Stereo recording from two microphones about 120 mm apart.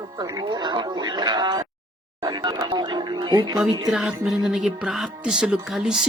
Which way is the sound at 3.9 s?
5° right (ahead or behind).